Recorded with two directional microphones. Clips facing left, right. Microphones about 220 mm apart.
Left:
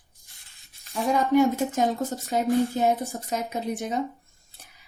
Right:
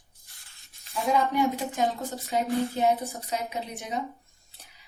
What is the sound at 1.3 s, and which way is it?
A woman's voice, 45° left (ahead or behind).